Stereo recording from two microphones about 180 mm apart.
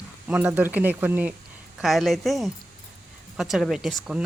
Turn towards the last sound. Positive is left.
turn(degrees=-5)  # may be behind; listen again after turning